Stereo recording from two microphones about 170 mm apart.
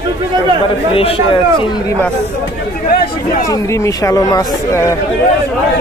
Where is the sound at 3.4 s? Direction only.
20° left (ahead or behind).